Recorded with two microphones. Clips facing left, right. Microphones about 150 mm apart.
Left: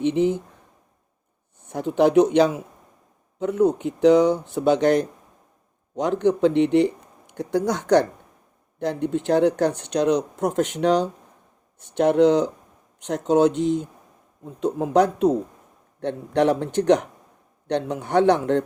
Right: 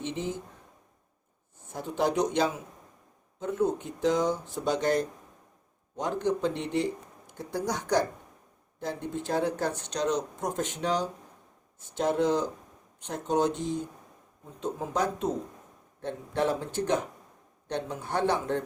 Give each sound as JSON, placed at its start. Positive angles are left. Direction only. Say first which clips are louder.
{"t": 0.0, "sound": "speech", "louder": "left 13 dB", "side_deg": 65}
{"t": 1.7, "sound": "speech", "louder": "left 11 dB", "side_deg": 70}